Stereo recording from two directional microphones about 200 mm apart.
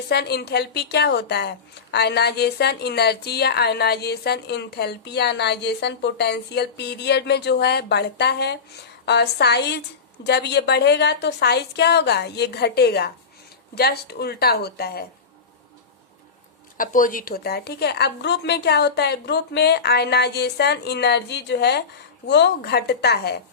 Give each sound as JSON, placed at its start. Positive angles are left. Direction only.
{"t": 0.1, "sound": "a woman's voice", "side_deg": 55}
{"t": 16.7, "sound": "a woman's voice", "side_deg": 45}